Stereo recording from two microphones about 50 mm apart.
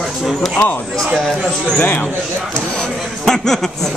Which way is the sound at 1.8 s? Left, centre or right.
Left.